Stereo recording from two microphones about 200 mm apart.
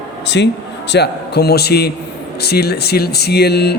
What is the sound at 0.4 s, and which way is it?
A man's voice, 60° left (ahead or behind).